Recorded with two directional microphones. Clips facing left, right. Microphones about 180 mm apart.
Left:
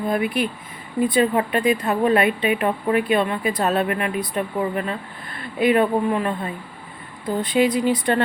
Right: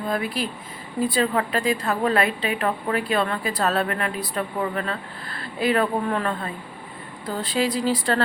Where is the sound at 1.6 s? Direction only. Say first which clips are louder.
Left 5 dB; 20° left (ahead or behind).